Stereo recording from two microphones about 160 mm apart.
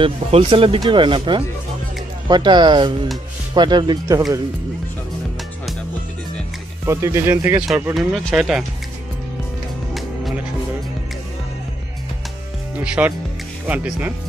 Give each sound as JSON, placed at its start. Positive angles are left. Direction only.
{"t": 0.0, "sound": "speech", "side_deg": -35}
{"t": 6.9, "sound": "speech", "side_deg": -15}
{"t": 7.6, "sound": "speech", "side_deg": -5}
{"t": 9.9, "sound": "music", "side_deg": 0}
{"t": 12.8, "sound": "speech", "side_deg": -5}